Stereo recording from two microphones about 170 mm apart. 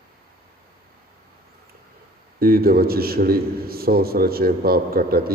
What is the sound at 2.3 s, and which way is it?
A man's voice, 65° right (ahead or behind).